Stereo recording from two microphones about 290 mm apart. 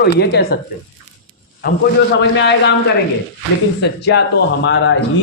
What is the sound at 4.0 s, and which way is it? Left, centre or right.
Speech, left.